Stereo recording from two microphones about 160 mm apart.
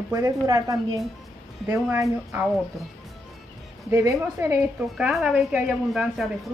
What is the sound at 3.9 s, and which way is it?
Speech, 20° right (ahead or behind).